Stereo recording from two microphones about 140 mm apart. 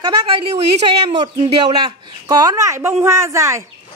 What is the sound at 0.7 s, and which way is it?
Speech, 50° right (ahead or behind).